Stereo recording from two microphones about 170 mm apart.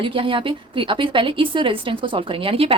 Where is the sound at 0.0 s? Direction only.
30° right (ahead or behind).